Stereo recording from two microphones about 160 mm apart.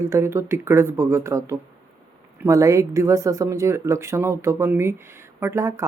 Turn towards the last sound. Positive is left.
turn(degrees=-15)  # may be behind; listen again after turning